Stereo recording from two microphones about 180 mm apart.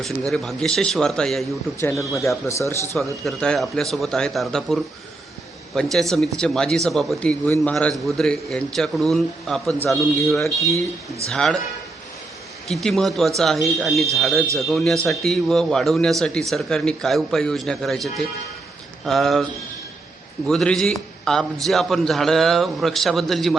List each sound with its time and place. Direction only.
0.0 s speech: centre (ahead or behind)
1.8 s speech: 15° left (ahead or behind)
3.0 s speech: centre (ahead or behind)
10.2 s speech: 15° left (ahead or behind)
11.3 s speech: 5° left (ahead or behind)
12.6 s speech: centre (ahead or behind)
20.5 s speech: 5° left (ahead or behind)